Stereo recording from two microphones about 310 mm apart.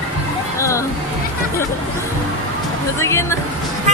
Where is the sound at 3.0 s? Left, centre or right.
Centre.